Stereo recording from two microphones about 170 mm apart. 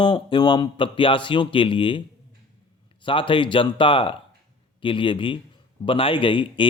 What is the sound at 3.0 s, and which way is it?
A man's voice, 30° left (ahead or behind).